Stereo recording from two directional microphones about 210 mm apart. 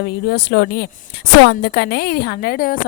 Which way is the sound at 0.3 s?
55° left (ahead or behind).